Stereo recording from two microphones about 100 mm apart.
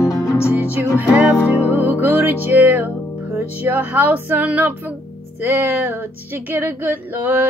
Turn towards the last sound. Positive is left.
turn(degrees=-20)  # may be behind; listen again after turning